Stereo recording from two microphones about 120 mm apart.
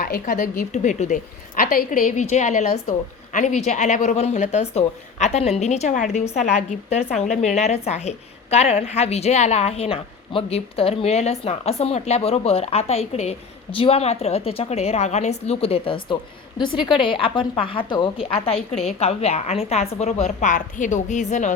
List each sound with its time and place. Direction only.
0.3 s a woman's voice: 90° left